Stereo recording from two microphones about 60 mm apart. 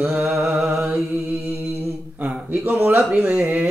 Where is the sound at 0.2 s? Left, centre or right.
Centre.